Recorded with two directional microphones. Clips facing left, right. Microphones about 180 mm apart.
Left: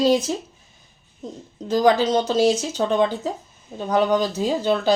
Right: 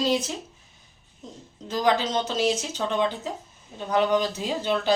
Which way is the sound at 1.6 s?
40° left (ahead or behind).